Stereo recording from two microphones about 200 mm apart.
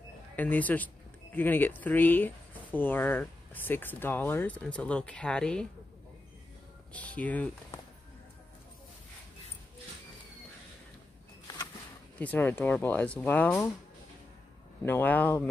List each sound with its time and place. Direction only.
0.4 s speech: 10° left (ahead or behind)
6.9 s speech: 5° left (ahead or behind)
11.4 s a sound: 20° left (ahead or behind)
12.2 s speech: 10° left (ahead or behind)
14.9 s speech: 10° left (ahead or behind)